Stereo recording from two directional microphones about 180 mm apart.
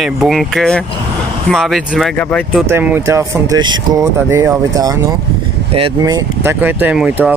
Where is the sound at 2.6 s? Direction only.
10° right (ahead or behind).